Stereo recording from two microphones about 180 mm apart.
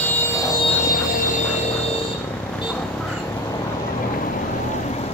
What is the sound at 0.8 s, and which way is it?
Music, 50° left (ahead or behind).